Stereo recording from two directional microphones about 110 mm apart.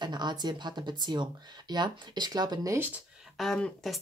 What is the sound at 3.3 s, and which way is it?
Speech, 5° left (ahead or behind).